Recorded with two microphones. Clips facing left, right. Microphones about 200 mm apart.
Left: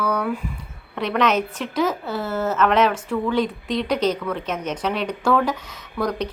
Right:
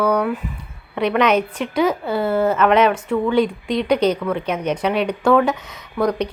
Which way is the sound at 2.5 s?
10° right (ahead or behind).